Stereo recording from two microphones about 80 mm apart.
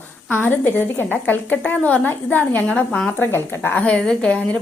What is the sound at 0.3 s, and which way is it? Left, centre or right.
A woman's voice, left.